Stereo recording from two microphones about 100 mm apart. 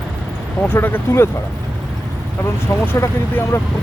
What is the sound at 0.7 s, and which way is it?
Speech, 20° left (ahead or behind).